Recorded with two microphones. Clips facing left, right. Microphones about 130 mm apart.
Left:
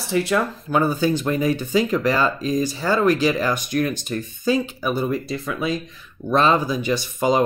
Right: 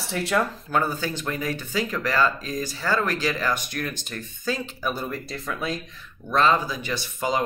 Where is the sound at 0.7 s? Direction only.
15° left (ahead or behind).